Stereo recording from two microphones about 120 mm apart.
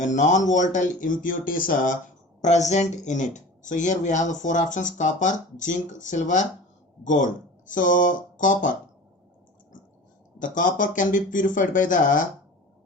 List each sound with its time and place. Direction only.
0.0 s speech: 90° left
2.4 s speech: 75° left (ahead or behind); by 8.7 s 90° left
10.4 s speech: 90° left